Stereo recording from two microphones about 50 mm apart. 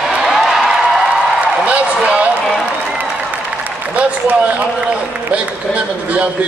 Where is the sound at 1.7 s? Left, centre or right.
Right.